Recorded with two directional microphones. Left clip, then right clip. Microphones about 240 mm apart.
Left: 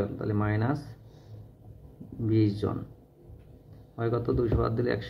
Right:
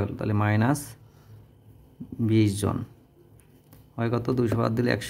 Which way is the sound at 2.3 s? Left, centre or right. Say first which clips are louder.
Right 2 dB; right.